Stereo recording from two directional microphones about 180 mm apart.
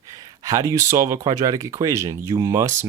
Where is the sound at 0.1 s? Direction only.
20° right (ahead or behind).